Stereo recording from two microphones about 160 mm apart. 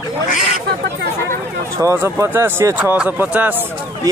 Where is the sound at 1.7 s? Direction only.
15° right (ahead or behind).